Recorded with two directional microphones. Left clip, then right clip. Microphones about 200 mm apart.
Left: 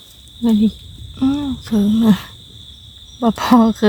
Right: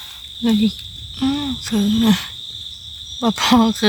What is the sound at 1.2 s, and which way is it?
Speech, 25° left (ahead or behind).